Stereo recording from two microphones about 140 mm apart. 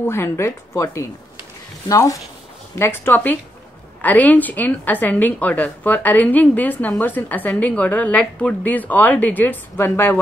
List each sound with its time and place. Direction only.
0.1 s a woman's voice: 20° left (ahead or behind)